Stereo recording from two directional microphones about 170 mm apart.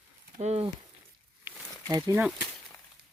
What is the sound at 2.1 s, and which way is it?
Speech, 10° right (ahead or behind).